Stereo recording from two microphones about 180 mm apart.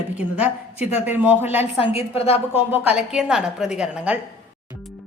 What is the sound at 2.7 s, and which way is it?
A woman's voice, 5° right (ahead or behind).